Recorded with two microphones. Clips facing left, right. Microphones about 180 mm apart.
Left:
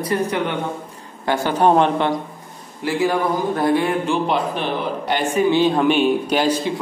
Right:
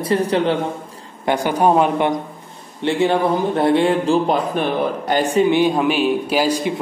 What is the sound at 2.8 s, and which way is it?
Speech, 25° right (ahead or behind).